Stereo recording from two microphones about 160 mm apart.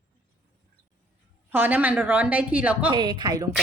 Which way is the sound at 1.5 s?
10° right (ahead or behind).